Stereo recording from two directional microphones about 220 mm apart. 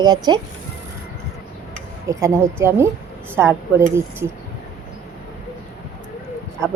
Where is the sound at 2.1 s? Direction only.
15° right (ahead or behind).